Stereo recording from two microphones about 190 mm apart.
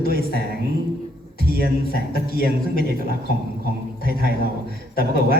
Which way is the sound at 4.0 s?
55° left (ahead or behind).